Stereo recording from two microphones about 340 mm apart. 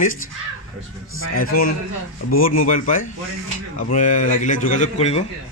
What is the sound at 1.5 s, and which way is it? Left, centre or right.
A man's voice, left.